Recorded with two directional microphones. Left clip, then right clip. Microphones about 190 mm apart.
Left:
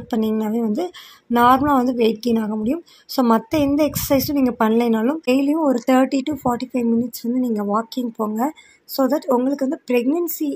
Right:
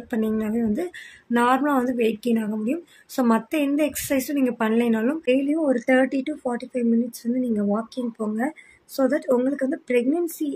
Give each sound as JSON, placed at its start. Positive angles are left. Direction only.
{"t": 0.1, "sound": "a woman's voice", "side_deg": 15}
{"t": 8.9, "sound": "a woman's voice", "side_deg": 15}